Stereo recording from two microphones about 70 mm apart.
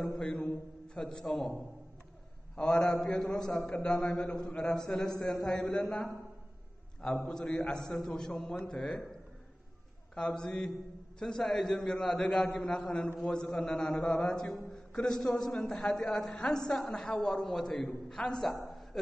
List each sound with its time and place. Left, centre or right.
0.0 s a woman's voice: centre
2.5 s a woman's voice: centre
10.1 s a woman's voice: centre